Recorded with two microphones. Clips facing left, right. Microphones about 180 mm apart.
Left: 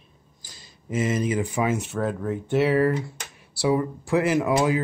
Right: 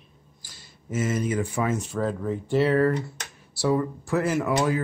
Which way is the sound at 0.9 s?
15° left (ahead or behind).